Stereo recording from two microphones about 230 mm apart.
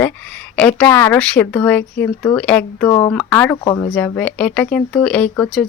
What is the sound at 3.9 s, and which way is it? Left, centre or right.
Speech, centre.